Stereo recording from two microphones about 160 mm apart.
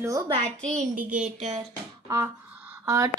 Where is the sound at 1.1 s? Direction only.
45° right (ahead or behind).